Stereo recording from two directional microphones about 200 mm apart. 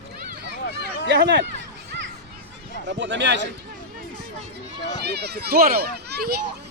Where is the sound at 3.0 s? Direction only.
60° right (ahead or behind).